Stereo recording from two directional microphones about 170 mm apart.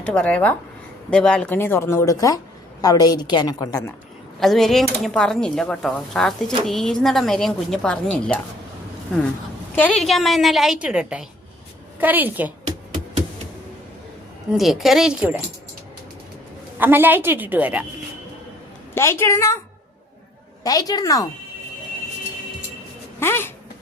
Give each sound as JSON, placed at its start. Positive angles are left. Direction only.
{"t": 0.0, "sound": "a woman's voice", "side_deg": 10}
{"t": 4.4, "sound": "speech", "side_deg": 0}
{"t": 9.7, "sound": "a woman's voice", "side_deg": 5}
{"t": 14.5, "sound": "speech", "side_deg": 0}
{"t": 16.7, "sound": "a woman's voice", "side_deg": -10}
{"t": 18.9, "sound": "speech", "side_deg": 15}
{"t": 20.7, "sound": "a woman's voice", "side_deg": 20}
{"t": 23.2, "sound": "speech", "side_deg": 15}